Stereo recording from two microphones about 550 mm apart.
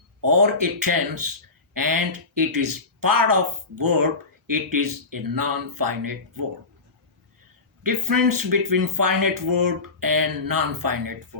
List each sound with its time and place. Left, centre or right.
0.2 s speech: right
7.9 s speech: right